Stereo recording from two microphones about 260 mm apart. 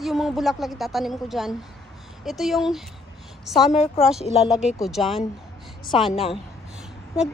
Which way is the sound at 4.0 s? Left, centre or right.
Centre.